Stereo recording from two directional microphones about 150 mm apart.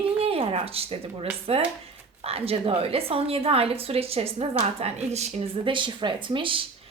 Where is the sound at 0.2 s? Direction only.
40° right (ahead or behind).